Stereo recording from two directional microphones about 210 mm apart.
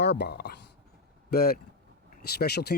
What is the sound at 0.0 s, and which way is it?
Speech, 55° left (ahead or behind).